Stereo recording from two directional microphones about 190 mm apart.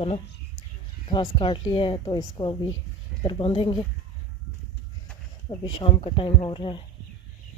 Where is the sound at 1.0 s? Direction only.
25° left (ahead or behind).